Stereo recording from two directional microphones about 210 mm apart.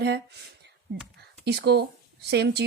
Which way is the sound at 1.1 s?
50° right (ahead or behind).